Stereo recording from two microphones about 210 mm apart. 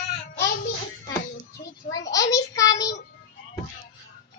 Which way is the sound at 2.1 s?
15° left (ahead or behind).